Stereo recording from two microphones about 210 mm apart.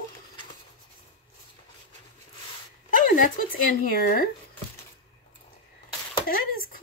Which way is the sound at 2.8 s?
40° left (ahead or behind).